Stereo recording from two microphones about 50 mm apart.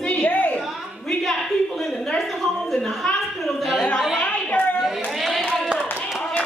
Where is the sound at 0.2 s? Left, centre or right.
Left.